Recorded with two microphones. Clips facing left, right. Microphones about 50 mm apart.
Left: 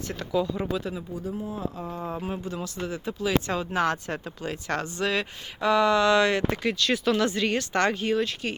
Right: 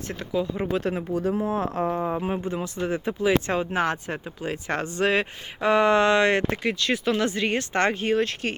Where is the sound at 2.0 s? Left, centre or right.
Right.